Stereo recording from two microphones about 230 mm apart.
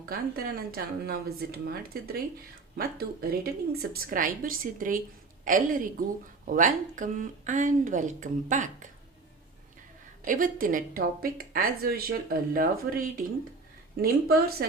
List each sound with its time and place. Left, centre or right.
0.0 s speech: right
10.2 s speech: right